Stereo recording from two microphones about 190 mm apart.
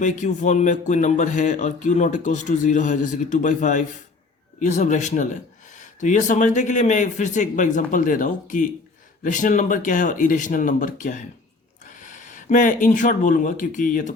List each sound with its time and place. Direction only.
0.0 s speech: 40° left (ahead or behind)